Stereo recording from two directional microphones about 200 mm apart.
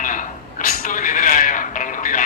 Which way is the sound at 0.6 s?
40° left (ahead or behind).